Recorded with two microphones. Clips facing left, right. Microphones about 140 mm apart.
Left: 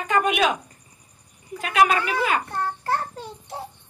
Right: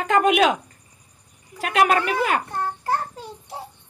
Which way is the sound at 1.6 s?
60° right (ahead or behind).